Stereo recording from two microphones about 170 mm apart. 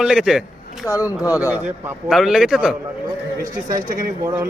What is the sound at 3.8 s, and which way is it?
Speech, 55° right (ahead or behind).